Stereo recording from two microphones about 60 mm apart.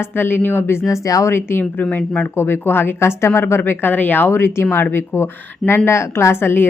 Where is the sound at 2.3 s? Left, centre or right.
Left.